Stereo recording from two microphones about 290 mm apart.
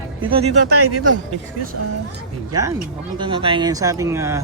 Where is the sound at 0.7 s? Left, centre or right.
Right.